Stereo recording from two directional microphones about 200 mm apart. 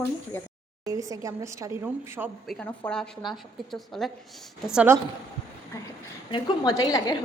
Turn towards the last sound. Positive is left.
turn(degrees=20)  # may be behind; listen again after turning